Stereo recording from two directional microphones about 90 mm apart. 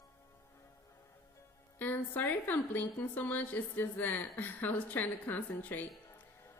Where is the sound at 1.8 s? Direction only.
20° left (ahead or behind).